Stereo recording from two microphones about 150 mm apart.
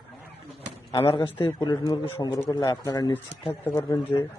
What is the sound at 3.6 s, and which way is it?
Speech, 15° left (ahead or behind).